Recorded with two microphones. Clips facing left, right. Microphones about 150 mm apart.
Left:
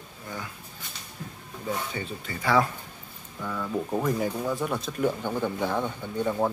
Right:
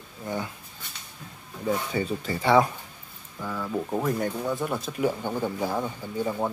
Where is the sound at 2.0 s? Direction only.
35° right (ahead or behind).